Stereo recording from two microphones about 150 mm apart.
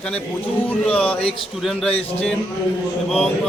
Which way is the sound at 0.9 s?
10° left (ahead or behind).